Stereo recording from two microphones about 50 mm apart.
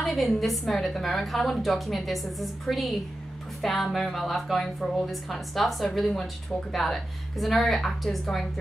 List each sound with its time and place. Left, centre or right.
0.0 s a woman's voice: centre